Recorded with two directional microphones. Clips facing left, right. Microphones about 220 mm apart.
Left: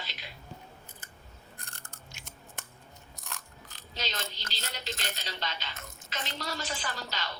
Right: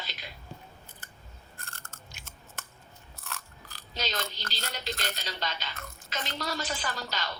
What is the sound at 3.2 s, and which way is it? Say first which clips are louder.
Biting: right 3 dB; 15° left (ahead or behind).